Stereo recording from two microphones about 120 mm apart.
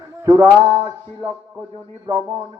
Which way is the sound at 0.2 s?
25° right (ahead or behind).